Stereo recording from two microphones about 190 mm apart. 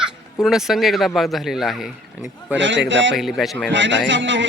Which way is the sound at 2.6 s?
75° right (ahead or behind).